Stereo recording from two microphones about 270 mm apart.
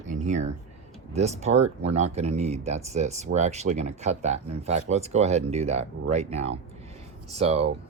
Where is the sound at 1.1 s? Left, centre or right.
Right.